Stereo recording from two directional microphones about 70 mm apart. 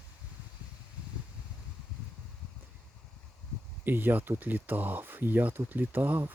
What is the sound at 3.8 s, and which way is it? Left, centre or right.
Speech, right.